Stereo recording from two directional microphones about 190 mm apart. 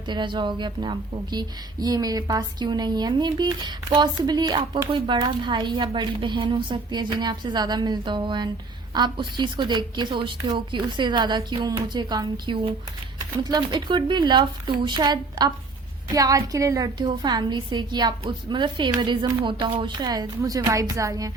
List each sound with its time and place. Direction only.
0.1 s a woman's voice: 25° right (ahead or behind)